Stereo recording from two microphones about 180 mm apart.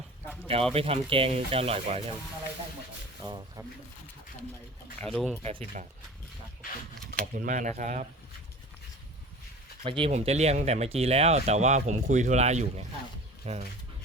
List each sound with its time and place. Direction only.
0.4 s speech: 30° right (ahead or behind)
3.2 s speech: 25° right (ahead or behind)
5.1 s speech: 5° left (ahead or behind)
7.1 s speech: 45° right (ahead or behind)
9.8 s speech: 30° right (ahead or behind)